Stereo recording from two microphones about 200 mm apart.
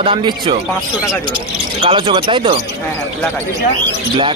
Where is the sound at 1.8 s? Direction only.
25° right (ahead or behind).